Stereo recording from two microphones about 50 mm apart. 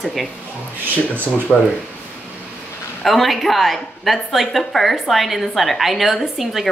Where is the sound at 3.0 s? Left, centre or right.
Centre.